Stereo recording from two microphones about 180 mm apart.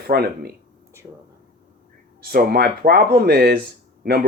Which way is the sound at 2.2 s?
55° right (ahead or behind).